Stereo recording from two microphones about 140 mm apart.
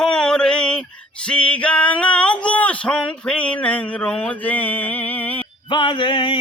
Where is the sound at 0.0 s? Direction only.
5° left (ahead or behind).